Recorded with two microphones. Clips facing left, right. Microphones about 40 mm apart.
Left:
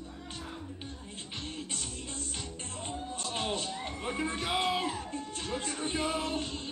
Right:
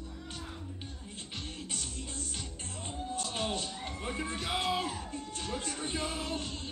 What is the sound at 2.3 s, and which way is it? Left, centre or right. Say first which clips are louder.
Speech: left 2 dB; centre.